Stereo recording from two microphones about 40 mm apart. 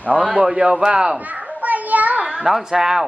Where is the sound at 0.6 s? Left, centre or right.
Right.